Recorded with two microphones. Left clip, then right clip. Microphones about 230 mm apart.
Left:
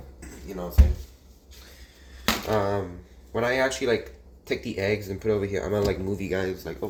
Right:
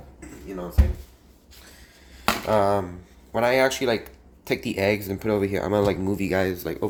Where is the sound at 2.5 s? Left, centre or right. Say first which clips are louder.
Right 5 dB; right.